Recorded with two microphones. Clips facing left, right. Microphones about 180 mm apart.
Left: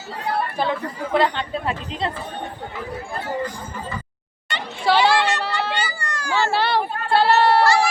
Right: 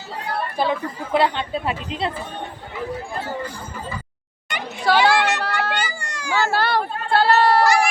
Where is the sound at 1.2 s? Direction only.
15° right (ahead or behind).